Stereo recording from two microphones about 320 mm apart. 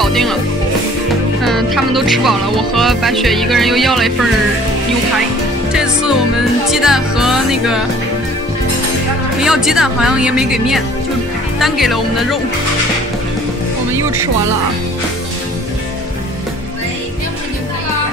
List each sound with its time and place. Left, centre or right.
0.0 s music: centre
1.4 s music: centre
6.7 s speech: centre
9.4 s speech: centre